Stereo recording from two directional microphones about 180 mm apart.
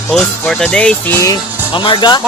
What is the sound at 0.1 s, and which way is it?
Music, 5° left (ahead or behind).